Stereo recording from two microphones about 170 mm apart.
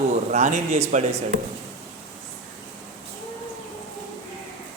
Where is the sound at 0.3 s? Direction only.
45° right (ahead or behind).